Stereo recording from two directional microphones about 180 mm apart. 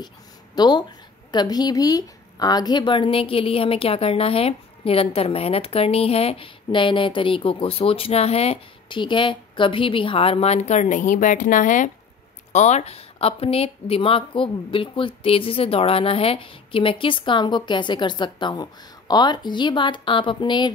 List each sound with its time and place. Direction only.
0.6 s a woman's voice: 25° left (ahead or behind)